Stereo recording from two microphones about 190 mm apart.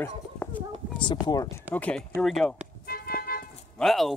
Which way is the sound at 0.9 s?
25° left (ahead or behind).